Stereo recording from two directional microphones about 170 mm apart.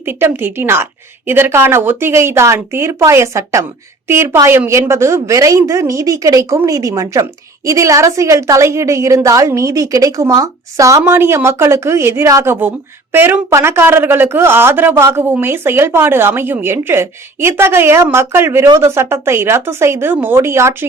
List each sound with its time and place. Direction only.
0.0 s a woman's voice: 10° right (ahead or behind)